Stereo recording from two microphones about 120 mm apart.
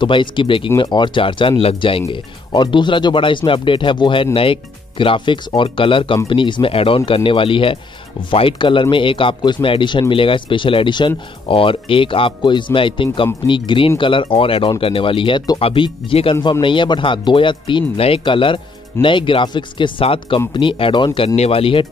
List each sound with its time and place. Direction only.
0.0 s speech: 45° left (ahead or behind)